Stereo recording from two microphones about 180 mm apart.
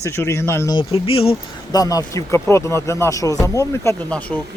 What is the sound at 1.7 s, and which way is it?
Speech, 20° left (ahead or behind).